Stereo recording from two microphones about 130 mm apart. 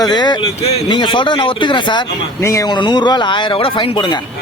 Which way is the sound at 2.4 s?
25° left (ahead or behind).